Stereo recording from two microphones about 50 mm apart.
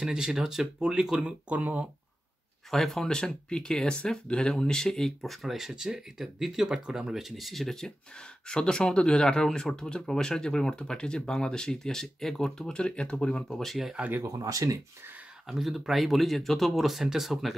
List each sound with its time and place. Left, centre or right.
0.0 s speech: centre
1.6 s speech: right
2.7 s speech: centre
13.5 s speech: centre
14.2 s speech: right
15.4 s speech: centre